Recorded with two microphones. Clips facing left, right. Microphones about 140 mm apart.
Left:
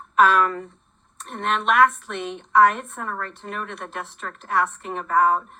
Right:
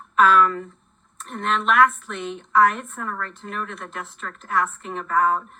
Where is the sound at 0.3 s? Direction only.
35° left (ahead or behind).